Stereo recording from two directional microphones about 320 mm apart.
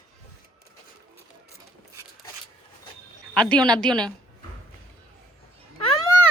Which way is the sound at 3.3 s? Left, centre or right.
Centre.